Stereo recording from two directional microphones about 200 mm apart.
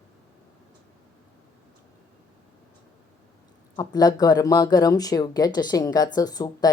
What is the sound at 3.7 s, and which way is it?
Speech, 20° left (ahead or behind).